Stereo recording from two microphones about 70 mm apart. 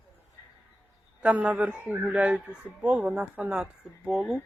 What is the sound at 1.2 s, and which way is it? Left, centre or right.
Speech, centre.